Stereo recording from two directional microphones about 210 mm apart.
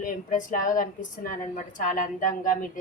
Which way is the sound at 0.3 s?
40° left (ahead or behind).